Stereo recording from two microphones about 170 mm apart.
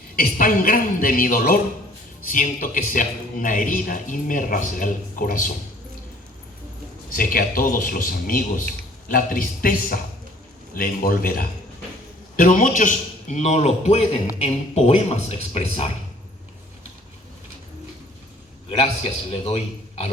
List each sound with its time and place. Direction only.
0.2 s a man's voice: 55° left (ahead or behind)
7.1 s a man's voice: 55° left (ahead or behind); by 15.9 s 35° left (ahead or behind)
18.7 s a man's voice: 35° left (ahead or behind)